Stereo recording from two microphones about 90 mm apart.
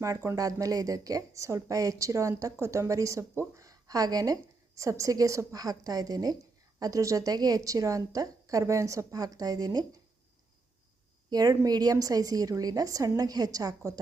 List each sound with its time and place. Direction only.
0.0 s a woman's voice: 35° right (ahead or behind)
11.3 s a woman's voice: 45° right (ahead or behind)